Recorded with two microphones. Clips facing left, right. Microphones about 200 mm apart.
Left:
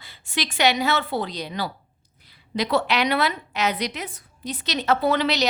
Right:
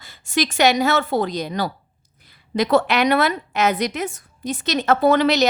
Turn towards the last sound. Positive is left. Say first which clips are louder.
# right 6 dB
turn(degrees=-50)  # may be behind; listen again after turning